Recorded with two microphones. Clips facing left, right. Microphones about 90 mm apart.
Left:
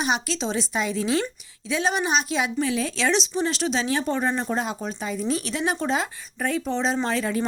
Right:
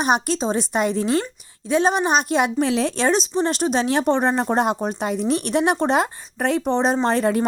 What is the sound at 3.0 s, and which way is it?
Speech, 40° right (ahead or behind).